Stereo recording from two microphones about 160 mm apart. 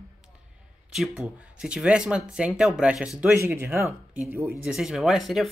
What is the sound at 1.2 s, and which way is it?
Speech, 5° right (ahead or behind).